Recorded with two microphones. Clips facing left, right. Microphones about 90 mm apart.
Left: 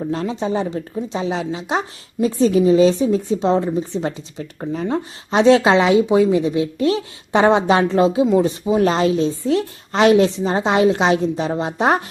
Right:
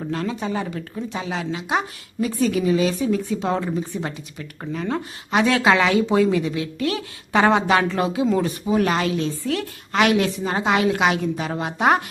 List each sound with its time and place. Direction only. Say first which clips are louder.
0.1 s a woman's voice: left 3 dB; 25° left (ahead or behind)